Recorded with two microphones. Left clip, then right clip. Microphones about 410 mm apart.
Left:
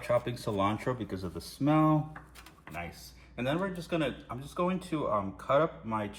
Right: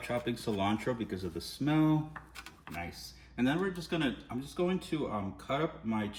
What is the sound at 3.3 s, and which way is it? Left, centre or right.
Speech, centre.